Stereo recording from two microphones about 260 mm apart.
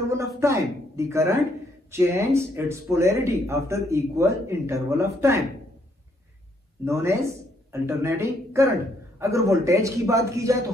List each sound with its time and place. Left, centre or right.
0.1 s a man's voice: centre
6.8 s speech: centre